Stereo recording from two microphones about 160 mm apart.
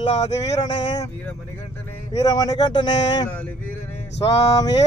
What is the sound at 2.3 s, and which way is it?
Speech, 25° left (ahead or behind).